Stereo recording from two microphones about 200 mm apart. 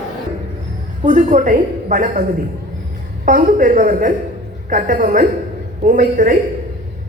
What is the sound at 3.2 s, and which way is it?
A woman's voice, 40° right (ahead or behind).